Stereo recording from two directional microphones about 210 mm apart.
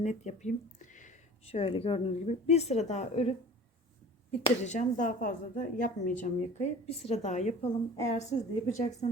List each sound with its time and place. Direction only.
0.0 s speech: 35° left (ahead or behind)